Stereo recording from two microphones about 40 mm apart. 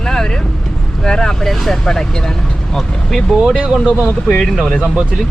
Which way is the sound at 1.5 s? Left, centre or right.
Centre.